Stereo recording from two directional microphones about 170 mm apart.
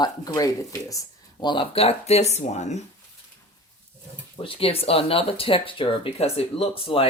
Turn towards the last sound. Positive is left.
turn(degrees=30)  # may be behind; listen again after turning